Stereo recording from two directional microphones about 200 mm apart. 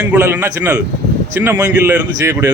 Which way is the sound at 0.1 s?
10° right (ahead or behind).